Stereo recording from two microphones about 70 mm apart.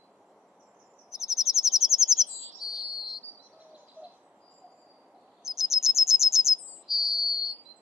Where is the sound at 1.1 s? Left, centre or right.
Centre.